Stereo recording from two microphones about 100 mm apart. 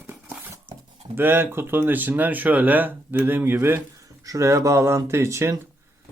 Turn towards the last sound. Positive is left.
turn(degrees=-25)  # may be behind; listen again after turning